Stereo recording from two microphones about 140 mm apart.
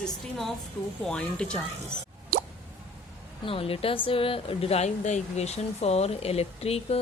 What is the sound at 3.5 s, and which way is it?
Speech, 40° left (ahead or behind).